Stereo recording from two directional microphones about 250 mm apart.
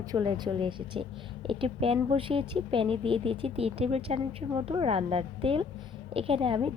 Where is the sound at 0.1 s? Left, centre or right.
Centre.